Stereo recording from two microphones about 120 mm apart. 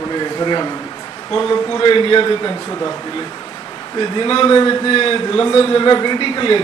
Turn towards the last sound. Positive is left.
turn(degrees=40)  # may be behind; listen again after turning